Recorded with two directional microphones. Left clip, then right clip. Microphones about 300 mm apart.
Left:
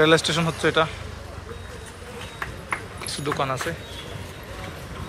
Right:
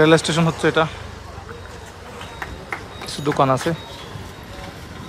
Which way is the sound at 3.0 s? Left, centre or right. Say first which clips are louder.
Right 3 dB; centre.